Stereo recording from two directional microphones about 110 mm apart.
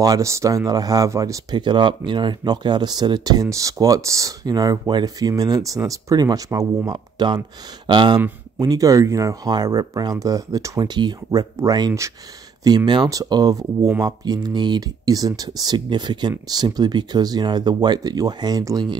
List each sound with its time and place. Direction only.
0.0 s speech: 30° right (ahead or behind)
8.5 s speech: 35° right (ahead or behind)